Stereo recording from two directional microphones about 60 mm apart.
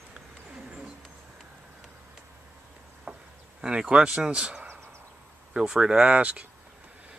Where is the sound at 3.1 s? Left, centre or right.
Right.